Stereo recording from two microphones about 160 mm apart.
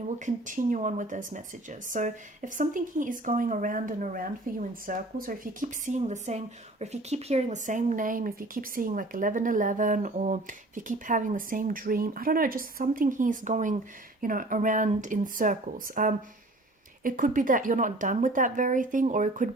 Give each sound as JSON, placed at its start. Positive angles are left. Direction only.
{"t": 0.3, "sound": "a woman's voice", "side_deg": -55}